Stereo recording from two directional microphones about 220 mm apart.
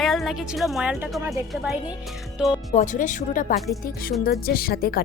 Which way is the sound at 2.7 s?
35° left (ahead or behind).